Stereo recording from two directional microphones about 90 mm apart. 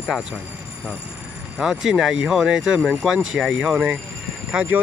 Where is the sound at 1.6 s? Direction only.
5° right (ahead or behind).